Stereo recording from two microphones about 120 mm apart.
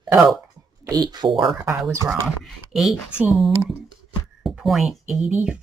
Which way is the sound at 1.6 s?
20° right (ahead or behind).